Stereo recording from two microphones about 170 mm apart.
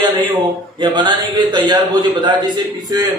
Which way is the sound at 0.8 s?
25° right (ahead or behind).